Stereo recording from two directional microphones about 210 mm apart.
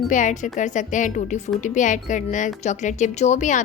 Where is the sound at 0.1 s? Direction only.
35° left (ahead or behind).